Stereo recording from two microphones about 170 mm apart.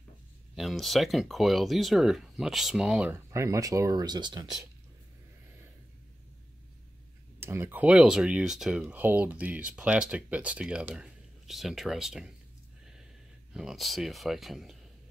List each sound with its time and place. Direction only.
0.6 s speech: centre (ahead or behind)
3.3 s speech: 20° right (ahead or behind)
7.3 s speech: 15° right (ahead or behind)
13.5 s speech: 5° right (ahead or behind)